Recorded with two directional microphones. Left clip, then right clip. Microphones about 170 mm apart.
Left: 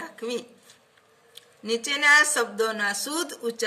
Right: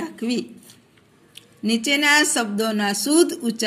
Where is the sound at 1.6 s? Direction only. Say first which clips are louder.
Right 2 dB; 20° right (ahead or behind).